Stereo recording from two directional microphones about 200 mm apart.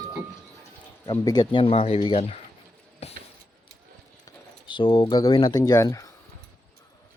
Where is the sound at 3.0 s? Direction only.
30° left (ahead or behind).